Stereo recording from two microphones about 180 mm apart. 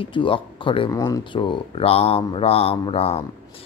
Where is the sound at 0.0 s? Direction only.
30° left (ahead or behind).